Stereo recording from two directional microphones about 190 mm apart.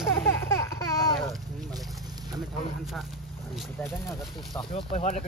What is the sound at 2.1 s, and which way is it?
Vehicle, 20° right (ahead or behind).